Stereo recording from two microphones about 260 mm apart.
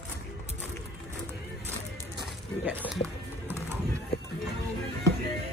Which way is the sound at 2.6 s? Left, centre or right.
Centre.